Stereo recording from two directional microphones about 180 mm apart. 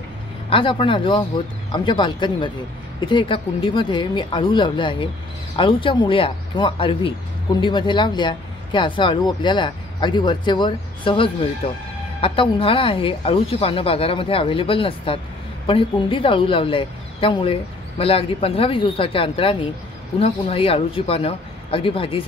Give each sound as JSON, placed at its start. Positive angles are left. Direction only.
{"t": 0.5, "sound": "a woman's voice", "side_deg": 30}